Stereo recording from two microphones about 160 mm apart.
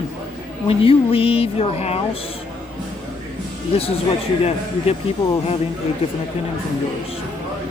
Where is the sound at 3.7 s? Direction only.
40° left (ahead or behind).